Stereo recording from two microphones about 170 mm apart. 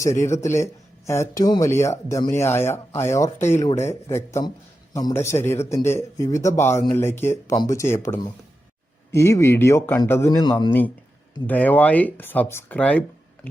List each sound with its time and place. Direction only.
0.0 s a man's voice: 15° left (ahead or behind)
10.7 s speech: 10° left (ahead or behind)